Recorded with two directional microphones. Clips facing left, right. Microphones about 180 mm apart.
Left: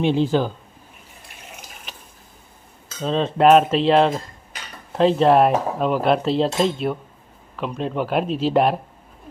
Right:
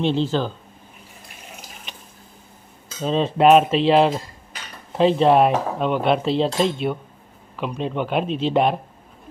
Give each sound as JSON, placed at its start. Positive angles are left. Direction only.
{"t": 0.0, "sound": "speech", "side_deg": 10}
{"t": 1.9, "sound": "a sound", "side_deg": 5}
{"t": 3.0, "sound": "cutlery", "side_deg": -5}